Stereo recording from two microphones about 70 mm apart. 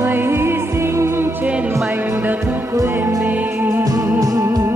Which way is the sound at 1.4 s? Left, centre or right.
Right.